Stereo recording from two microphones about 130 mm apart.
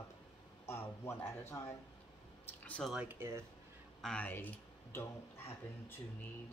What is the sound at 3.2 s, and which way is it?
Speech, 15° right (ahead or behind).